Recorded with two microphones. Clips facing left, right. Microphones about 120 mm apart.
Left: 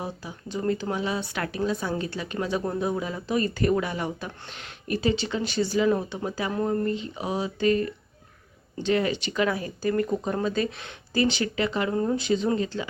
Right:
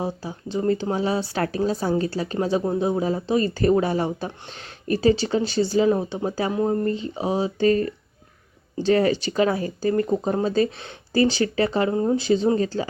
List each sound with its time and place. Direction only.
0.0 s speech: 30° right (ahead or behind)